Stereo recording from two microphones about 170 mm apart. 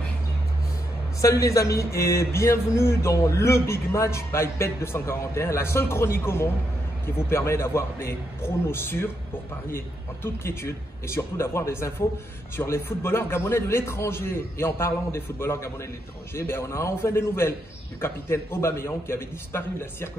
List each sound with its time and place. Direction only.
1.2 s a man's voice: 20° left (ahead or behind)